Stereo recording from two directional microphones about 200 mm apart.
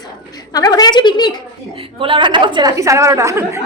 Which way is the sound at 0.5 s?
20° left (ahead or behind).